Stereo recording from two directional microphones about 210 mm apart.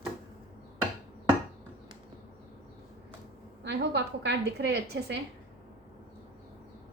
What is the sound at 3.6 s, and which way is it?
A woman's voice, 55° right (ahead or behind).